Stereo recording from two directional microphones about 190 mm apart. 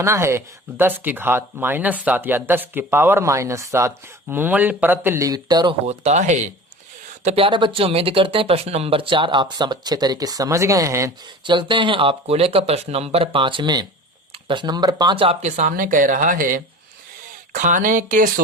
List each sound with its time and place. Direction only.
0.0 s speech: 15° right (ahead or behind)
5.8 s speech: 35° right (ahead or behind)
7.3 s speech: 30° right (ahead or behind); by 18.3 s 45° right (ahead or behind)